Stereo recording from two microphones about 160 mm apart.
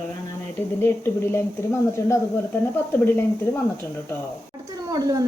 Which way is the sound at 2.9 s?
10° left (ahead or behind).